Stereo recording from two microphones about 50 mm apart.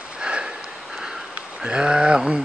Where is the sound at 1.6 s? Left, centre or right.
Centre.